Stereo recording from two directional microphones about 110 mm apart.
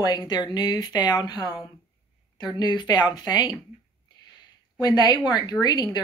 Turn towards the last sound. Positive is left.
turn(degrees=40)  # may be behind; listen again after turning